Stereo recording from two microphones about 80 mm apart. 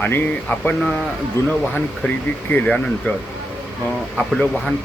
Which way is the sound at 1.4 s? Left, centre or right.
Left.